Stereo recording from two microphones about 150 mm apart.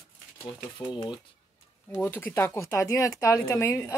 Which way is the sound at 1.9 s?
10° left (ahead or behind).